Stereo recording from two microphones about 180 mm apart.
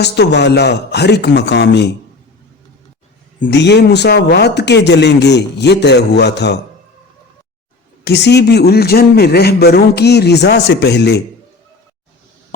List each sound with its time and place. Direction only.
0.0 s speech: 70° left (ahead or behind)
3.5 s speech: 70° left (ahead or behind)
8.0 s a man's voice: 70° left (ahead or behind)